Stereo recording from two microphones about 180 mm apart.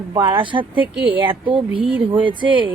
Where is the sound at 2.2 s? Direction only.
25° right (ahead or behind).